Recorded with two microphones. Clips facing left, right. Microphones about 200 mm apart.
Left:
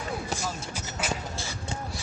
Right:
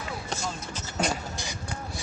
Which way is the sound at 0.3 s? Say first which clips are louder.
Left 1 dB; 10° left (ahead or behind).